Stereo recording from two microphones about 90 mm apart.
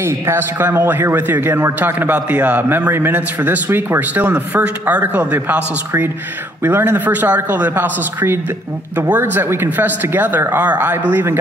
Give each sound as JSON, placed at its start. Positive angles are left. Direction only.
{"t": 0.0, "sound": "a man's voice", "side_deg": -25}